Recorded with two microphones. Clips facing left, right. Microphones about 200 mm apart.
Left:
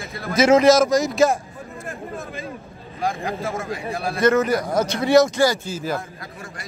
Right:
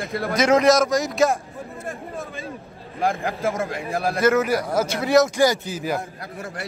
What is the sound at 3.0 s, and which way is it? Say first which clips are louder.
Speech: right 2 dB; 50° right (ahead or behind).